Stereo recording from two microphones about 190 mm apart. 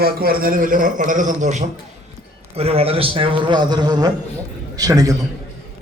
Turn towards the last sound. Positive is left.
turn(degrees=-20)  # may be behind; listen again after turning